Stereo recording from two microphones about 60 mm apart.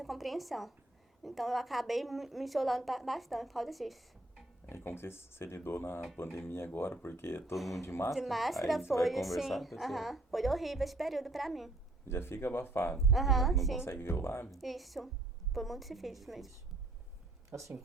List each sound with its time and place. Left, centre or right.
0.0 s a woman's voice: centre
4.7 s speech: left
7.5 s a woman's voice: centre
7.8 s speech: left
8.1 s a woman's voice: centre
12.0 s speech: left
13.0 s a woman's voice: centre
13.8 s speech: left
14.5 s a woman's voice: centre
17.5 s a woman's voice: right